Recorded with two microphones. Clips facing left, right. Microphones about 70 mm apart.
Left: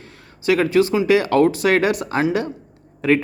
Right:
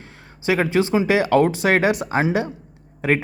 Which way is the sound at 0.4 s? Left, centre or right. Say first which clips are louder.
Left 3 dB; right.